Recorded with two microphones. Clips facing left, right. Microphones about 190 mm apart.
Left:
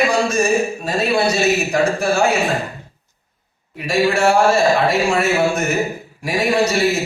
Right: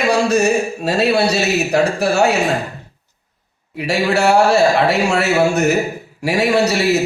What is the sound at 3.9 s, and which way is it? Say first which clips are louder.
A man's voice: right 1 dB; 70° right (ahead or behind).